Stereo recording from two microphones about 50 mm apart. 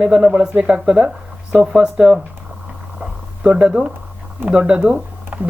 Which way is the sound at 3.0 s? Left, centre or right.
Centre.